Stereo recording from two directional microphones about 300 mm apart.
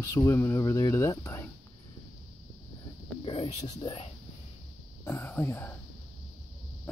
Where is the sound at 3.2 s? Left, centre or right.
Centre.